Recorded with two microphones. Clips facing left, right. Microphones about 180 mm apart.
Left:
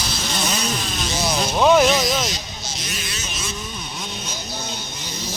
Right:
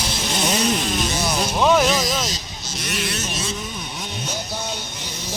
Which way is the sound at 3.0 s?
60° right (ahead or behind).